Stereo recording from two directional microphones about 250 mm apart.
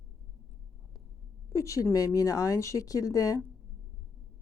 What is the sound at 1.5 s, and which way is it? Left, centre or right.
A woman's voice, centre.